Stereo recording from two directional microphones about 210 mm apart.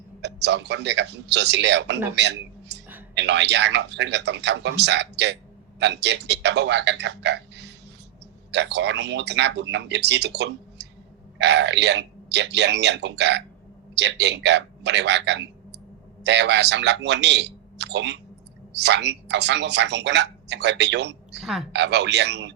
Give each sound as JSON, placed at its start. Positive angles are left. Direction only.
{"t": 0.2, "sound": "a woman's voice", "side_deg": -55}
{"t": 2.1, "sound": "a sound", "side_deg": -55}
{"t": 3.2, "sound": "a woman's voice", "side_deg": -55}